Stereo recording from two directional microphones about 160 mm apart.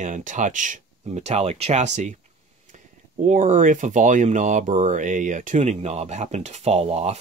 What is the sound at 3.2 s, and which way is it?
Speech, 50° right (ahead or behind).